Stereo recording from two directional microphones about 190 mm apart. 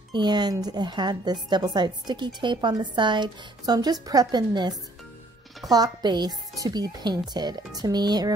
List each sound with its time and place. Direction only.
0.1 s a woman's voice: 25° right (ahead or behind)